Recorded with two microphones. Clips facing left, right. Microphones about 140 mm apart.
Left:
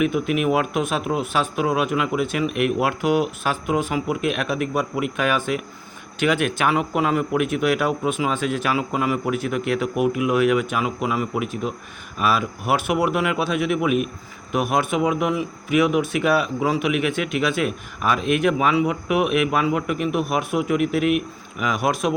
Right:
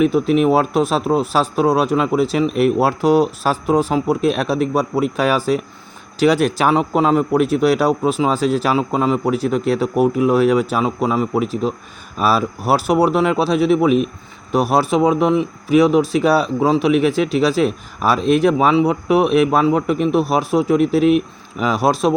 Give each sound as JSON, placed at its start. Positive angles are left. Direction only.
{"t": 0.0, "sound": "speech", "side_deg": -35}